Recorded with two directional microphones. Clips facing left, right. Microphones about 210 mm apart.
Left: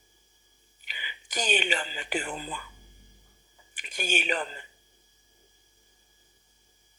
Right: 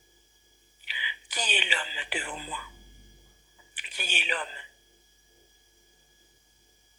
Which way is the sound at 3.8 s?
45° left (ahead or behind).